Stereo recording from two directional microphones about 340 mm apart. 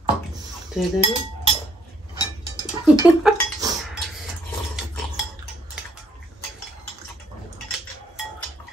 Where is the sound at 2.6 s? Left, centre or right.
Centre.